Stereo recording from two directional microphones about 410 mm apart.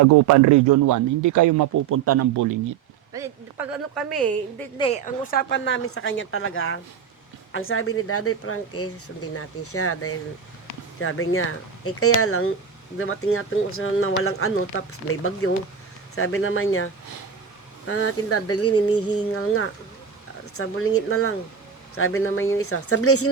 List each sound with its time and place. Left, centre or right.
0.0 s speech: right
1.9 s speech: right
3.1 s speech: centre
4.8 s speech: centre; by 18.8 s left
20.5 s speech: left